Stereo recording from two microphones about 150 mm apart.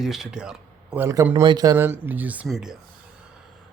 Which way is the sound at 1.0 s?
25° right (ahead or behind).